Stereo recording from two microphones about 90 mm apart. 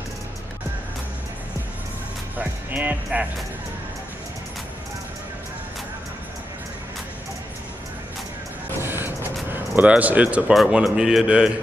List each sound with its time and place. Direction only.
2.3 s speech: 20° right (ahead or behind)
8.8 s a sound: 25° right (ahead or behind)
10.5 s a man's voice: 5° right (ahead or behind)